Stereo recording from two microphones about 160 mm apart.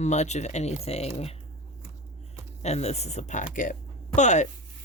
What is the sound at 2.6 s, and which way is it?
Speech, 45° left (ahead or behind).